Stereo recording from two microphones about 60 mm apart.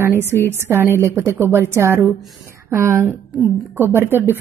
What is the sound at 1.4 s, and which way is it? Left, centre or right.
A woman's voice, right.